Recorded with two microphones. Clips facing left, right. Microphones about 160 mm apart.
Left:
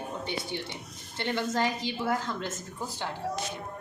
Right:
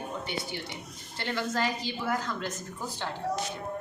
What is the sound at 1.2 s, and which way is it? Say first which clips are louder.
A woman's voice: left 2 dB; 20° left (ahead or behind).